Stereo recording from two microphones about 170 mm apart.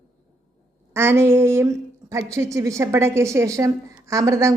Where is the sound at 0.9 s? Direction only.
15° right (ahead or behind).